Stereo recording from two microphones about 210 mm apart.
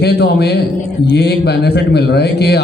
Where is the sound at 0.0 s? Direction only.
50° left (ahead or behind).